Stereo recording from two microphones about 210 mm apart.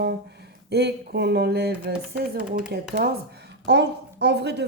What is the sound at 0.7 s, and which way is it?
A woman's voice, 50° right (ahead or behind).